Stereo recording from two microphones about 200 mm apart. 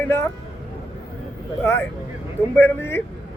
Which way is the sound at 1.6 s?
10° left (ahead or behind).